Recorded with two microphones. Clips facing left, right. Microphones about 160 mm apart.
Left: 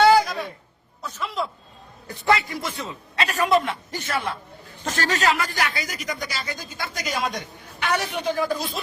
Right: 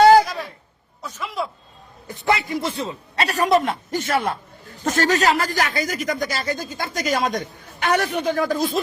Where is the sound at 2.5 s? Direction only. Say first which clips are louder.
Right 6 dB; 30° right (ahead or behind).